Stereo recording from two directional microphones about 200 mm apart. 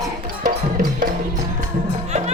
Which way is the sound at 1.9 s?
35° right (ahead or behind).